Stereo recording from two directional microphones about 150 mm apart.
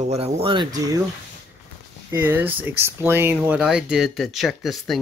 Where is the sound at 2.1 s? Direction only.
15° right (ahead or behind).